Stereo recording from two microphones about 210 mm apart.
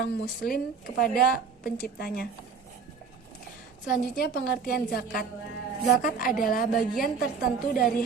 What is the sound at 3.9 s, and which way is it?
A woman's voice, 45° left (ahead or behind).